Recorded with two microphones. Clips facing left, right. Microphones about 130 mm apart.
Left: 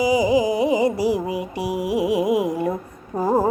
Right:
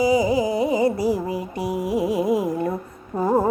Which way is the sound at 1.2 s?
5° left (ahead or behind).